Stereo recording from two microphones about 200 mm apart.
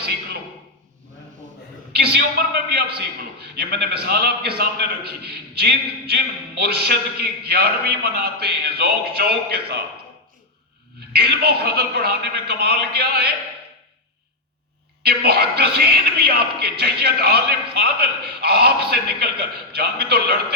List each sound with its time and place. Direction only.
1.9 s a man's voice: 55° right (ahead or behind)
11.1 s a man's voice: 50° right (ahead or behind)
15.0 s a man's voice: 50° right (ahead or behind)